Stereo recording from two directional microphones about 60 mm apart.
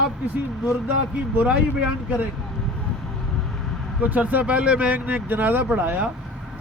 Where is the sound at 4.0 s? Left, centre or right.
Right.